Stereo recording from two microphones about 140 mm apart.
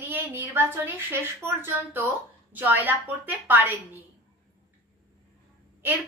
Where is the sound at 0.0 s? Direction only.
10° right (ahead or behind).